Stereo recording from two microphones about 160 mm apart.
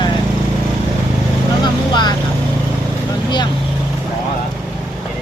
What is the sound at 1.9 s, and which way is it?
Vehicle, 25° left (ahead or behind).